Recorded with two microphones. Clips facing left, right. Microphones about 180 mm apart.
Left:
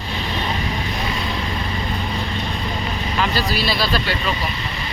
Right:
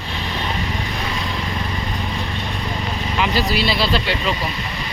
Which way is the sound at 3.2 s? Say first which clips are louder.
Right 2 dB; 15° right (ahead or behind).